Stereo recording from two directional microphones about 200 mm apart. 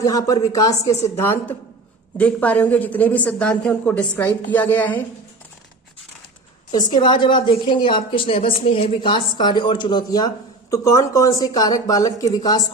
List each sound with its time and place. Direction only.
0.0 s speech: 15° left (ahead or behind)
6.7 s a woman's voice: 20° left (ahead or behind)